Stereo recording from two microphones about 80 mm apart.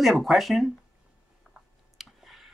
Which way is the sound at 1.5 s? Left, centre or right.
Centre.